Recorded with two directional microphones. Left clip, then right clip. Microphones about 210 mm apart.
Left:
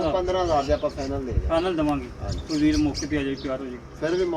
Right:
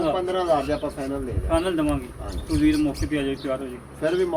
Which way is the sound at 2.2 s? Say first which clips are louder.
Right 1 dB; 15° right (ahead or behind).